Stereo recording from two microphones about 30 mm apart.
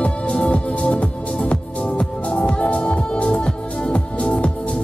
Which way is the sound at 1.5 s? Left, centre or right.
Left.